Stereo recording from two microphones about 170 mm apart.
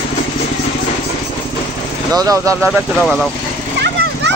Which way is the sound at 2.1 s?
20° right (ahead or behind).